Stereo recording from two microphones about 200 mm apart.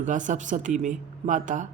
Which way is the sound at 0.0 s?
40° right (ahead or behind).